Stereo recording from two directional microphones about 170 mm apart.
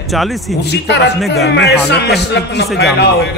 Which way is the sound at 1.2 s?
Centre (ahead or behind).